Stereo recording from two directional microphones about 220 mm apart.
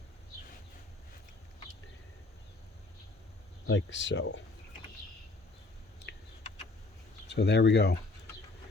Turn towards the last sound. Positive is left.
turn(degrees=50)  # may be behind; listen again after turning